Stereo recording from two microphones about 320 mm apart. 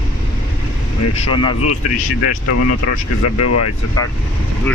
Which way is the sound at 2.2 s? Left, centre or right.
Left.